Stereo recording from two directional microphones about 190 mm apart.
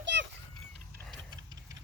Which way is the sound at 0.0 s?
70° right (ahead or behind).